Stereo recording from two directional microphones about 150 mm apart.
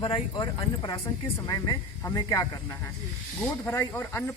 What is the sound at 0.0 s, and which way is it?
Speech, 30° left (ahead or behind).